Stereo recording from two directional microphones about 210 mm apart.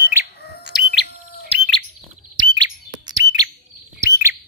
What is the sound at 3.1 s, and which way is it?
Chirp, 20° right (ahead or behind).